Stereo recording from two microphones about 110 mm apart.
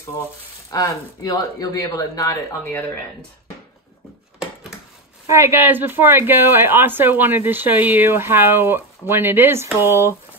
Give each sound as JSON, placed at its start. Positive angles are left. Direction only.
{"t": 0.7, "sound": "speech", "side_deg": 30}
{"t": 5.3, "sound": "a woman's voice", "side_deg": -25}